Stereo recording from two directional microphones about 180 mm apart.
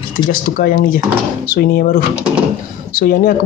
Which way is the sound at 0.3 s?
50° left (ahead or behind).